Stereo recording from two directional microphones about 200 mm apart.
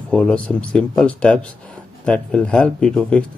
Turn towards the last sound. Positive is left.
turn(degrees=5)  # may be behind; listen again after turning